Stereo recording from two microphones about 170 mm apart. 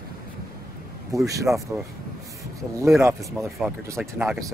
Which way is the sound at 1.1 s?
20° right (ahead or behind).